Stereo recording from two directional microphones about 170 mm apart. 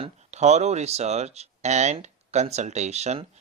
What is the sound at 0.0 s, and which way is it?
Speech, 40° right (ahead or behind).